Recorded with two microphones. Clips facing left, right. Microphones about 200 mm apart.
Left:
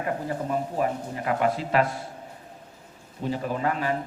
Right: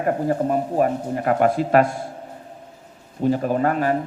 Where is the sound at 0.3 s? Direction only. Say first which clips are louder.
Right 7 dB; 50° right (ahead or behind).